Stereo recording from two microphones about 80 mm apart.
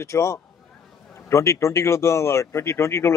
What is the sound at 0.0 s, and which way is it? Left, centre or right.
Speech, left.